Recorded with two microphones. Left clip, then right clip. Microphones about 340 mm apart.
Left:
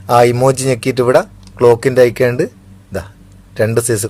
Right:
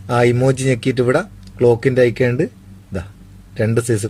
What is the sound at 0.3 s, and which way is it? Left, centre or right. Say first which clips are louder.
Speech: left 4 dB; centre.